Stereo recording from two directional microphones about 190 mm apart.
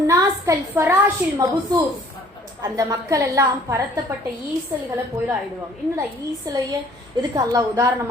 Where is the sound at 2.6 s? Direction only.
15° right (ahead or behind).